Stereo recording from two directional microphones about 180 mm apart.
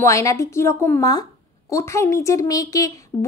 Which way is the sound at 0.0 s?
15° left (ahead or behind).